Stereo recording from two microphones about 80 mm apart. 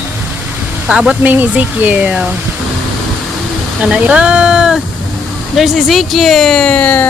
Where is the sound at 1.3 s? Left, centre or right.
Right.